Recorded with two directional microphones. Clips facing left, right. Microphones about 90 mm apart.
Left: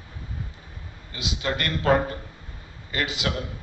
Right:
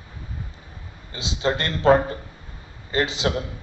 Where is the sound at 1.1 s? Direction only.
30° right (ahead or behind).